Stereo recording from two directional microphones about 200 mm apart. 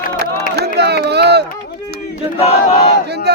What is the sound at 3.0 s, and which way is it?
Speech, 55° right (ahead or behind).